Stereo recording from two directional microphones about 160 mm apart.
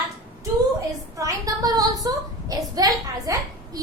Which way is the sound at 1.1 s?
20° right (ahead or behind).